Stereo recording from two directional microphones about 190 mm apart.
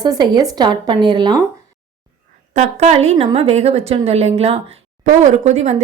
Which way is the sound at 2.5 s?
40° right (ahead or behind).